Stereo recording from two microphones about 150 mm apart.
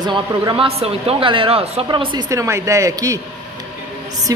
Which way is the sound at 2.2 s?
20° right (ahead or behind).